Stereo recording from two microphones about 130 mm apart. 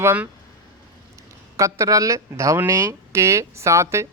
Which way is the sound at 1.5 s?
25° right (ahead or behind).